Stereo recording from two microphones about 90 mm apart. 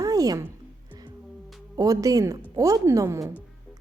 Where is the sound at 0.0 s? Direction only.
40° right (ahead or behind).